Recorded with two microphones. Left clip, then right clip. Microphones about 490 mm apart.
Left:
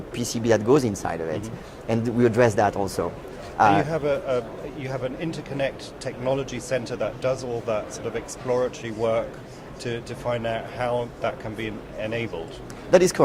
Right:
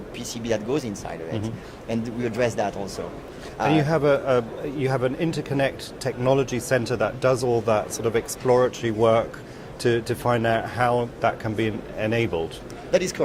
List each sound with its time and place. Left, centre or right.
0.2 s speech: left
3.8 s a man's voice: right
12.9 s speech: left